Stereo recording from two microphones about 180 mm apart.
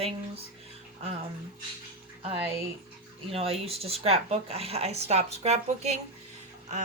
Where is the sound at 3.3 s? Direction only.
35° right (ahead or behind).